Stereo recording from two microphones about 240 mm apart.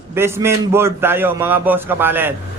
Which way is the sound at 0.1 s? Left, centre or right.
Centre.